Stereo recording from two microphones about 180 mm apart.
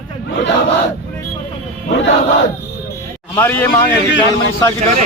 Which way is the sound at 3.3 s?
10° left (ahead or behind).